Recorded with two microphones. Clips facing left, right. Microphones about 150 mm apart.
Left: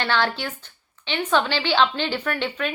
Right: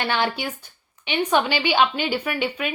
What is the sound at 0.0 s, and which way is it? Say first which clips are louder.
Speech: even; 15° right (ahead or behind).